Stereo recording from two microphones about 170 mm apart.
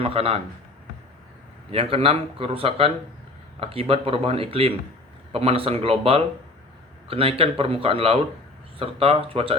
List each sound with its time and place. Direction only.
0.0 s speech: 35° right (ahead or behind)
1.7 s speech: 35° right (ahead or behind)